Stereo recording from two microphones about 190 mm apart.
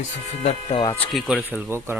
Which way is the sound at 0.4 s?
25° left (ahead or behind).